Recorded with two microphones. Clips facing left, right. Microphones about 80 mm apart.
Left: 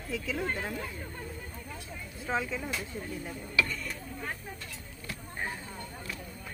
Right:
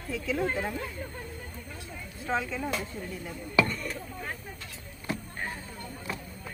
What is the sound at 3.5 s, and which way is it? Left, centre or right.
Speech, right.